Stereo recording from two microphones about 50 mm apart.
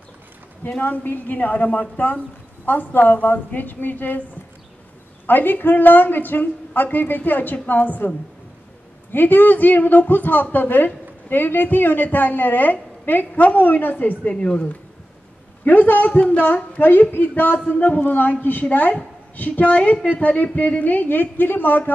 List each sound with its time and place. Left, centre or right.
0.8 s a woman's voice: left
5.2 s a woman's voice: left
9.1 s a woman's voice: left
14.3 s a woman's voice: centre
15.6 s a woman's voice: left